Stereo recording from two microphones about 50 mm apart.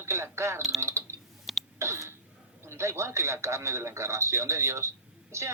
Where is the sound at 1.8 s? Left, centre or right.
Right.